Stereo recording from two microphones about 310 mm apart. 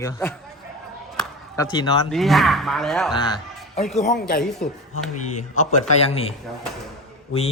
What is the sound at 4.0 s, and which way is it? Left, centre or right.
Speech, left.